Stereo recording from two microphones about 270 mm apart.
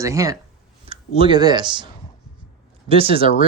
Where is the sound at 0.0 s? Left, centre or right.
Centre.